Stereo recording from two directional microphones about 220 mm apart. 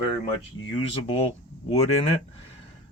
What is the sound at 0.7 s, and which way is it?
Speech, 25° left (ahead or behind).